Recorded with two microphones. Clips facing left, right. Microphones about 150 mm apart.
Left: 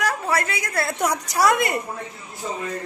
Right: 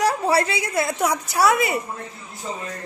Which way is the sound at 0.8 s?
10° right (ahead or behind).